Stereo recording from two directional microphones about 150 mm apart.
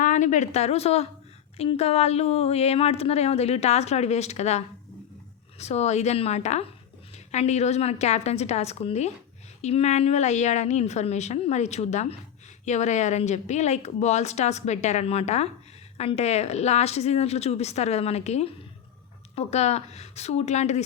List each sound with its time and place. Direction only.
0.0 s a woman's voice: 55° left (ahead or behind)